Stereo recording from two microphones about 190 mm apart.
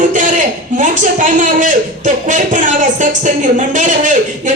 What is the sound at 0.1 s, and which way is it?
A man's voice, 40° right (ahead or behind).